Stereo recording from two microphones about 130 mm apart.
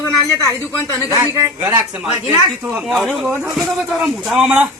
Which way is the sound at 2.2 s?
10° right (ahead or behind).